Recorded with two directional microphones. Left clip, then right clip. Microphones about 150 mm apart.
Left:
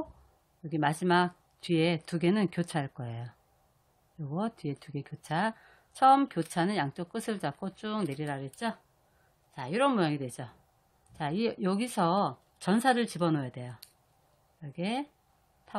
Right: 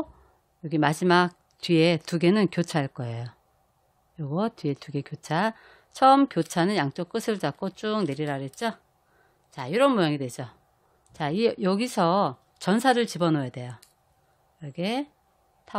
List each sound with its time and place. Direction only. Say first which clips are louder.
0.6 s a woman's voice: right 6 dB; 55° right (ahead or behind)